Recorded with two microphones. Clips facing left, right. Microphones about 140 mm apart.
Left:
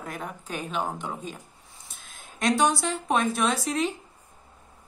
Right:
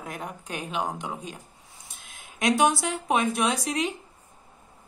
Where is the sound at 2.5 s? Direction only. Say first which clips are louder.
Right 1 dB; 20° right (ahead or behind).